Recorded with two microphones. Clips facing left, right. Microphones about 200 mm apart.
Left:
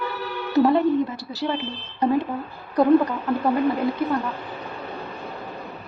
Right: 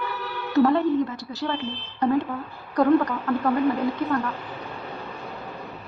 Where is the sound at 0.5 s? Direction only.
15° left (ahead or behind).